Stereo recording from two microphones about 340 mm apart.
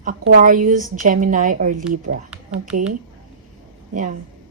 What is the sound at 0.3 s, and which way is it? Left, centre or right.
A woman's voice, right.